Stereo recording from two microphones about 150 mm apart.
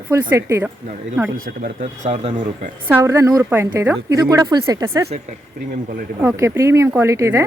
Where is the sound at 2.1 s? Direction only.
45° right (ahead or behind).